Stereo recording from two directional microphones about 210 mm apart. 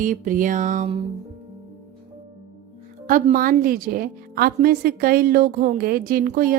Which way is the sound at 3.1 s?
40° right (ahead or behind).